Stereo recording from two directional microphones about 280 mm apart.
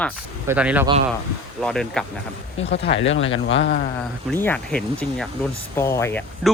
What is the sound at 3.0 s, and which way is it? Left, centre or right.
Speech, left.